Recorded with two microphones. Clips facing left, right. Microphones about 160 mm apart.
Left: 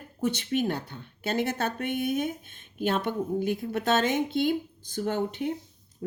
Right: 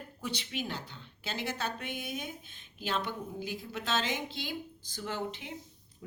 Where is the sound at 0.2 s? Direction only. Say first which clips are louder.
Left 11 dB; 50° left (ahead or behind).